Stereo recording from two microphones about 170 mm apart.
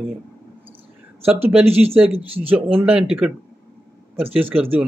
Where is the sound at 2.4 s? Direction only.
10° right (ahead or behind).